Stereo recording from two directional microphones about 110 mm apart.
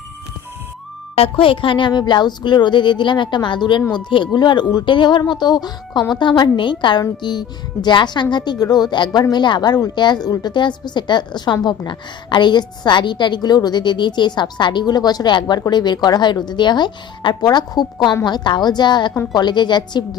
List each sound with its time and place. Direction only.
1.1 s a woman's voice: 55° left (ahead or behind); by 20.1 s 40° left (ahead or behind)